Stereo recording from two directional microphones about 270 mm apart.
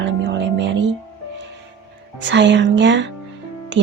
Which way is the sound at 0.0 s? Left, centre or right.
Right.